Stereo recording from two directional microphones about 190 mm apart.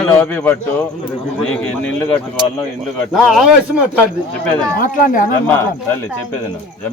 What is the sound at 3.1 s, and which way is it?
Speech, centre (ahead or behind).